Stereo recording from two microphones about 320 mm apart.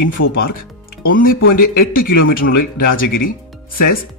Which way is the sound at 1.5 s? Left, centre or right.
Left.